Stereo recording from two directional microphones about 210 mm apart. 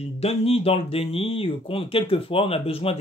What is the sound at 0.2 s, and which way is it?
Speech, 30° left (ahead or behind).